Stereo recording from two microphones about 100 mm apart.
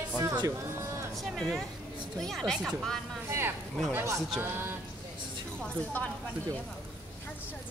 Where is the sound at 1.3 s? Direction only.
Centre (ahead or behind).